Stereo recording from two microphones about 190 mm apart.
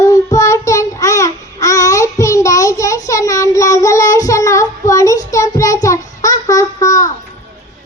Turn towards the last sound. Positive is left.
turn(degrees=15)  # may be behind; listen again after turning